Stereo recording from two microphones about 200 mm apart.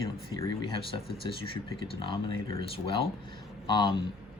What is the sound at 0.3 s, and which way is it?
Speech, 20° left (ahead or behind).